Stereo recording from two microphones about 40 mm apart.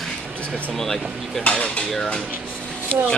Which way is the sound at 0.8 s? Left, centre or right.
Centre.